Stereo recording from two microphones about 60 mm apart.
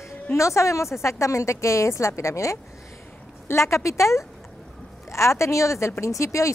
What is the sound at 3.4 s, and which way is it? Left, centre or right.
A woman's voice, left.